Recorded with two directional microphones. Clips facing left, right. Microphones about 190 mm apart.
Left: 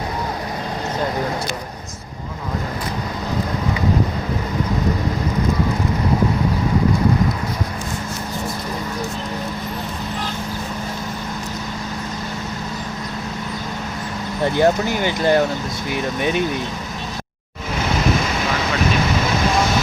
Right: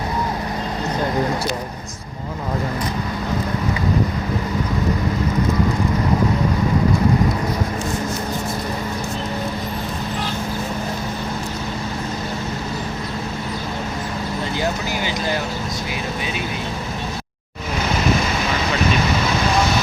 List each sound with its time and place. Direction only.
14.4 s speech: 55° left (ahead or behind)